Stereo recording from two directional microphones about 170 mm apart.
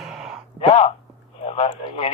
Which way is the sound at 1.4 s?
35° left (ahead or behind).